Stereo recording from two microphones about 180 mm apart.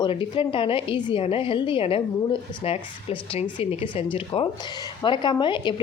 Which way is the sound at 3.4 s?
30° left (ahead or behind).